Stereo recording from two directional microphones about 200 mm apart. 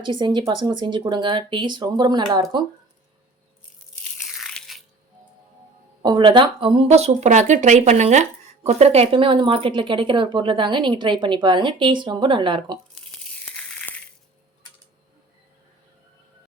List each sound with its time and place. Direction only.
0.0 s speech: 25° right (ahead or behind)
4.0 s crunch: centre (ahead or behind)
6.0 s speech: 20° right (ahead or behind)
13.4 s crushing: 5° left (ahead or behind)